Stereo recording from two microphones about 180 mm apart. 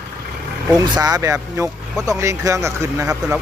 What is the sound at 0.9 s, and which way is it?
Speech, 20° right (ahead or behind).